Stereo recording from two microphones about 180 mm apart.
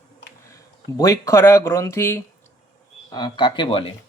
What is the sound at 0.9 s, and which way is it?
Speech, 20° left (ahead or behind).